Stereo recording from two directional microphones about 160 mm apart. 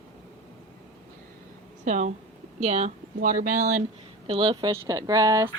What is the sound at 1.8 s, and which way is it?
Speech, 50° right (ahead or behind).